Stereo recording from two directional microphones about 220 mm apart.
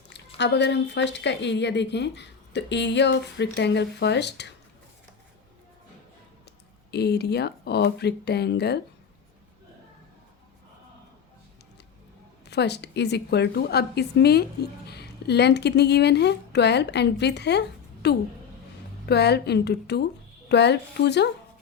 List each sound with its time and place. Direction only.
0.3 s speech: 50° left (ahead or behind)
6.9 s speech: 50° left (ahead or behind)
12.5 s speech: 50° left (ahead or behind)